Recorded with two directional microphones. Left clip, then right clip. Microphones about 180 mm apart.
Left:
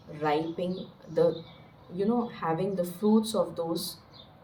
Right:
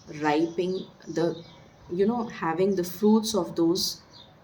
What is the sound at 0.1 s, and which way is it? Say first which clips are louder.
Speech: right 3 dB; 55° right (ahead or behind).